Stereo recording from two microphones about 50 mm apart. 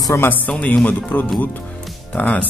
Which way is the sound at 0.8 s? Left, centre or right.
Left.